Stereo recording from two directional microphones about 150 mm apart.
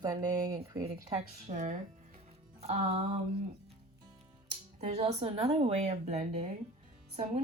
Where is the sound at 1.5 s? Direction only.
55° right (ahead or behind).